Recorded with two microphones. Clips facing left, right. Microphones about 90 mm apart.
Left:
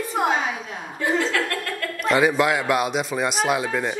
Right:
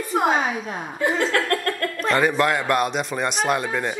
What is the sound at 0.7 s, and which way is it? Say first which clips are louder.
Speech: right 1 dB; 50° right (ahead or behind).